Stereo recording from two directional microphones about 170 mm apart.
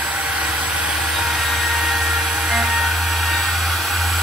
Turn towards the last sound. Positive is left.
turn(degrees=0)  # may be behind; listen again after turning